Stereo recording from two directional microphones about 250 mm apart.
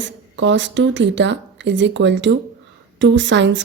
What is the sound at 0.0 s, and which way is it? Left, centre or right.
Speech, right.